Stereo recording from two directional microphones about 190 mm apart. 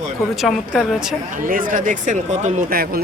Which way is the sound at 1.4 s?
45° right (ahead or behind).